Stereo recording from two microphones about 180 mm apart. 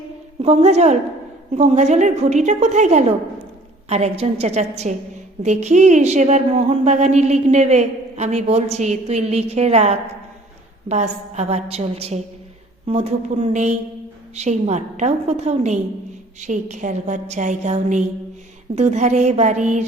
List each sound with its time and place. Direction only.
0.4 s a woman's voice: 35° right (ahead or behind)